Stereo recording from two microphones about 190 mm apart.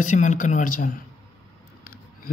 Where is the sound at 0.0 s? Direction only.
40° left (ahead or behind).